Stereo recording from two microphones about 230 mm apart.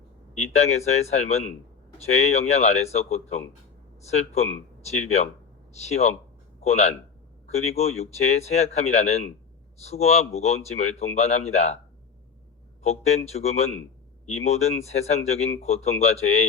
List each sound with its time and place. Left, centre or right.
0.3 s a man's voice: left
12.8 s speech: left